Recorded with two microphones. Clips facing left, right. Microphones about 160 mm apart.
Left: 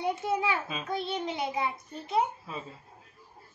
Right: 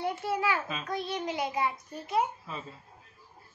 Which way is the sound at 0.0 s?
20° left (ahead or behind).